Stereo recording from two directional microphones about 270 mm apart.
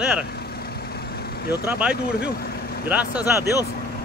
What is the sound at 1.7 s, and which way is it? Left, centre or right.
Speech, centre.